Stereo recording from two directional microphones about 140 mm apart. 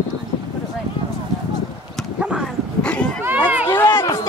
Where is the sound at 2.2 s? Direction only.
5° right (ahead or behind).